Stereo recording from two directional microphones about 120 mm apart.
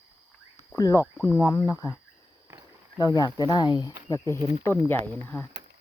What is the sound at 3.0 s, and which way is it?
Speech, 30° left (ahead or behind).